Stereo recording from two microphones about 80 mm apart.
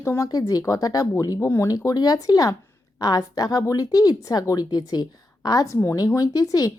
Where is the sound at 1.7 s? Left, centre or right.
Left.